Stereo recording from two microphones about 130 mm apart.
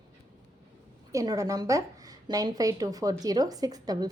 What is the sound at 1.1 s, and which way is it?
A woman's voice, 25° right (ahead or behind).